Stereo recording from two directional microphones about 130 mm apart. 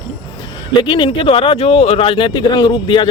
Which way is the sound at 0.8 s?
40° left (ahead or behind).